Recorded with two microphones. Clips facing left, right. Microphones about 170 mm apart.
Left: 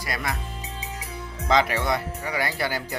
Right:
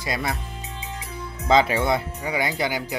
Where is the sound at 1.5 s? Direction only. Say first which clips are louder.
Right 3 dB; 25° right (ahead or behind).